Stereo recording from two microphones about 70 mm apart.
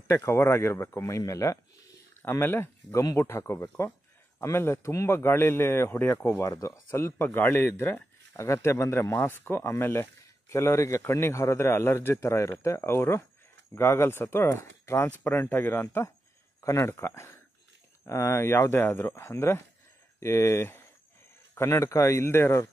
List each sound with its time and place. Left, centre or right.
0.1 s a man's voice: left
2.2 s a man's voice: left
6.4 s speech: left
7.2 s speech: left
8.4 s a man's voice: left
15.0 s a man's voice: left